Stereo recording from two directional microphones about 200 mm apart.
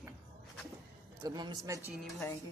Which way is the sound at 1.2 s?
20° right (ahead or behind).